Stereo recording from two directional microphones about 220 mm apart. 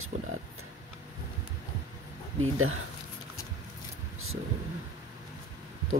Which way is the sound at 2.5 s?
70° right (ahead or behind).